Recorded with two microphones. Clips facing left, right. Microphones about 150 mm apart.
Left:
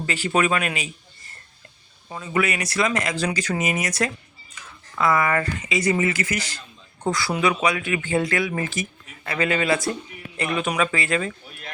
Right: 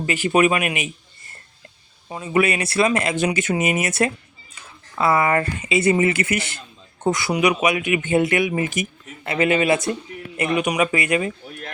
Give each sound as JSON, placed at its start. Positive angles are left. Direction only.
{"t": 0.0, "sound": "speech", "side_deg": -20}
{"t": 2.0, "sound": "speech", "side_deg": -20}